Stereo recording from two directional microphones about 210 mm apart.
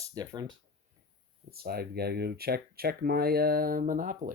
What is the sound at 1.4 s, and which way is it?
Speech, 45° right (ahead or behind).